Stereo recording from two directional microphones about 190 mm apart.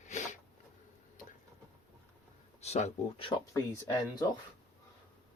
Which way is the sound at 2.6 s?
35° left (ahead or behind).